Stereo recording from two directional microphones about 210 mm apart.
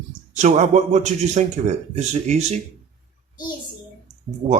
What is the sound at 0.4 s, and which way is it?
Speech, 35° right (ahead or behind).